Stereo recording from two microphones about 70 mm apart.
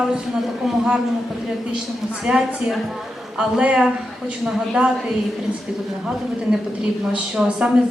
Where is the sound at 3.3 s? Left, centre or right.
Centre.